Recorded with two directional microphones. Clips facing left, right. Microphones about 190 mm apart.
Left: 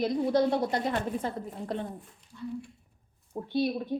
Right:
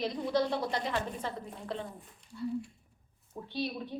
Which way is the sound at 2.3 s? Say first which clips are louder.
Right 3 dB; 10° right (ahead or behind).